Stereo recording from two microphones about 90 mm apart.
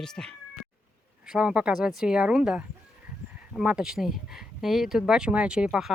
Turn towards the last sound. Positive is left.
turn(degrees=-10)  # may be behind; listen again after turning